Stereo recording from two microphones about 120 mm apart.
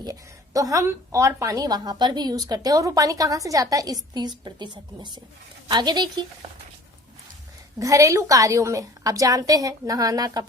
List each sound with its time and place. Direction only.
0.0 s a woman's voice: 30° right (ahead or behind)
7.8 s a woman's voice: 25° right (ahead or behind)